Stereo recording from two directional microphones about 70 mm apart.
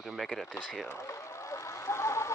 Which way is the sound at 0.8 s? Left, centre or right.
Left.